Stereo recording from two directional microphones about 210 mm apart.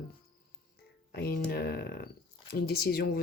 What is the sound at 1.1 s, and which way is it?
Speech, 50° left (ahead or behind).